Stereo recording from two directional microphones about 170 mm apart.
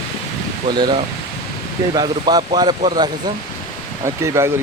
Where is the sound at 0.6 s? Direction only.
25° right (ahead or behind).